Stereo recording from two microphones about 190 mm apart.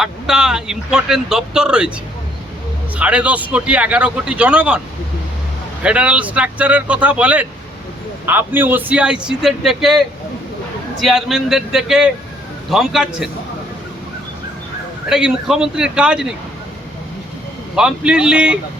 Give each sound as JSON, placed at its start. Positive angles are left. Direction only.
{"t": 0.0, "sound": "speech", "side_deg": -5}
{"t": 2.9, "sound": "a man's voice", "side_deg": -5}
{"t": 5.8, "sound": "a man's voice", "side_deg": -5}
{"t": 11.0, "sound": "speech", "side_deg": -5}
{"t": 15.1, "sound": "speech", "side_deg": -5}
{"t": 17.7, "sound": "speech", "side_deg": -5}